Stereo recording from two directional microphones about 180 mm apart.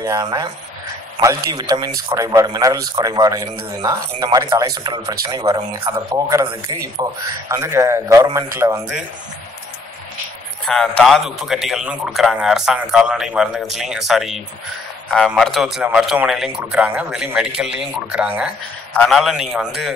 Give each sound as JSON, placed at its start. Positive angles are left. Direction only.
{"t": 0.0, "sound": "a man's voice", "side_deg": -20}
{"t": 10.6, "sound": "a man's voice", "side_deg": 5}